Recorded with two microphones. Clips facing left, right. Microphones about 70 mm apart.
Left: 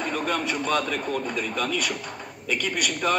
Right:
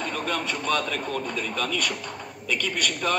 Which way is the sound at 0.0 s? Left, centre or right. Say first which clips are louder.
Left 2 dB; centre.